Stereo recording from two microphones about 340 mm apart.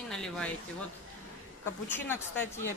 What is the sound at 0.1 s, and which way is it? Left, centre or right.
Speech, centre.